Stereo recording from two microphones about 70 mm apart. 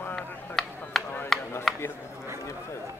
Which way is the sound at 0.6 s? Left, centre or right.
Centre.